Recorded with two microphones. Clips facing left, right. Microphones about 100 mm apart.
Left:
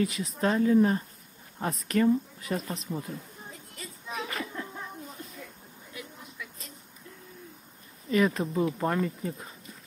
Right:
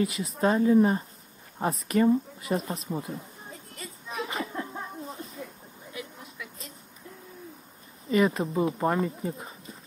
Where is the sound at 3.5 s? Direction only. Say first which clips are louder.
Right 2 dB; centre (ahead or behind).